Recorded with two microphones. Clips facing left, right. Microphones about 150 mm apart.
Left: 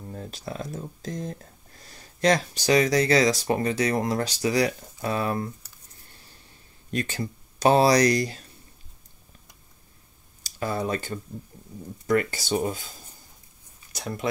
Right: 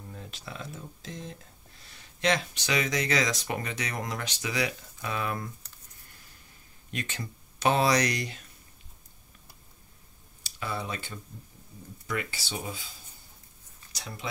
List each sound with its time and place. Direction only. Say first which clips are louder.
0.1 s speech: left 8 dB; 40° left (ahead or behind)
6.1 s a sound: left 3 dB; 30° left (ahead or behind)
6.9 s speech: left 8 dB; 40° left (ahead or behind)
10.4 s speech: left 7 dB; 40° left (ahead or behind)
13.9 s speech: left 9 dB; 50° left (ahead or behind)